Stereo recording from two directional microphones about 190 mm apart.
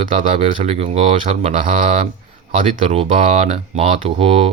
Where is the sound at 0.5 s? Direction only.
35° right (ahead or behind).